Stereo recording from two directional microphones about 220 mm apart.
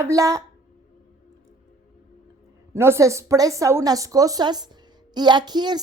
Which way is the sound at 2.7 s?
10° right (ahead or behind).